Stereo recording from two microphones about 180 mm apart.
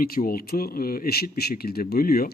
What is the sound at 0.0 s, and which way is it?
Speech, 55° left (ahead or behind).